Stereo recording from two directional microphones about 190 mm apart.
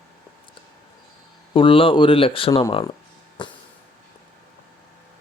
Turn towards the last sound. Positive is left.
turn(degrees=25)  # may be behind; listen again after turning